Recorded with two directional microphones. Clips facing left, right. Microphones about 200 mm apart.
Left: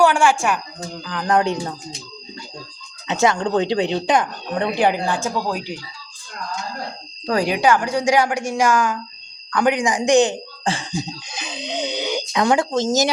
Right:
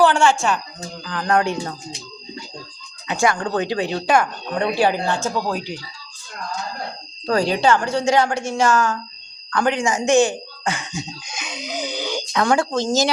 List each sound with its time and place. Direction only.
0.0 s a woman's voice: 10° left (ahead or behind)
3.1 s speech: 20° left (ahead or behind)
7.3 s a woman's voice: 15° left (ahead or behind)
10.6 s speech: 30° left (ahead or behind)